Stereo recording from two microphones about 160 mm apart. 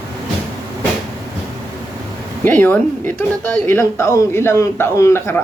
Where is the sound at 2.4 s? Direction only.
10° left (ahead or behind).